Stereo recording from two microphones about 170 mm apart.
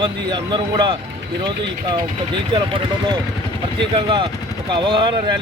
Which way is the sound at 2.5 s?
30° right (ahead or behind).